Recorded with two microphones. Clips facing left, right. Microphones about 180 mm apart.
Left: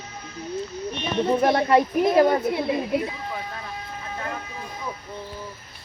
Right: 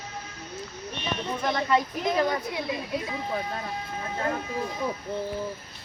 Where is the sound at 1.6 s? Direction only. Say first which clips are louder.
Left 6 dB; 40° left (ahead or behind).